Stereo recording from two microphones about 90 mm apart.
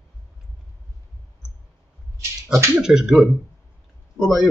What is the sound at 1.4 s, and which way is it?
Clicking, 5° right (ahead or behind).